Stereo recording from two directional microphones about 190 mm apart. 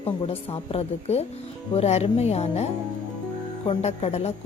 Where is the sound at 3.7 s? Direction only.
35° left (ahead or behind).